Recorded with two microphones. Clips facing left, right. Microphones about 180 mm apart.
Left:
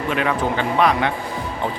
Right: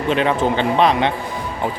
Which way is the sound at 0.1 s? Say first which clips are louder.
Right 4 dB; 25° right (ahead or behind).